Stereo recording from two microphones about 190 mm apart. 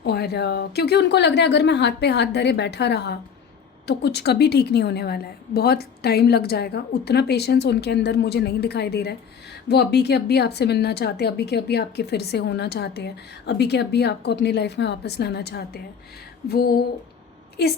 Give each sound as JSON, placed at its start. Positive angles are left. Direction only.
{"t": 0.0, "sound": "a woman's voice", "side_deg": 60}
{"t": 16.5, "sound": "a sound", "side_deg": 55}
{"t": 17.6, "sound": "a woman's voice", "side_deg": 55}